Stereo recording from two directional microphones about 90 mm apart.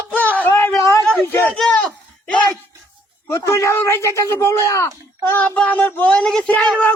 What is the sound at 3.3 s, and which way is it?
Speech, 30° left (ahead or behind).